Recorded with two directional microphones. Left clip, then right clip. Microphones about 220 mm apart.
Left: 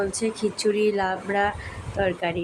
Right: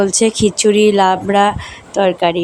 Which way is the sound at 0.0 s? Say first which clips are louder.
Right 12 dB; 35° right (ahead or behind).